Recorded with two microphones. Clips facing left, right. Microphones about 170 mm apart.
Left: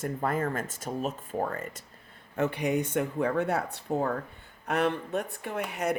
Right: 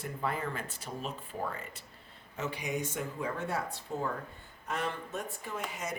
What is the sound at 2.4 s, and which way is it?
Speech, 60° left (ahead or behind).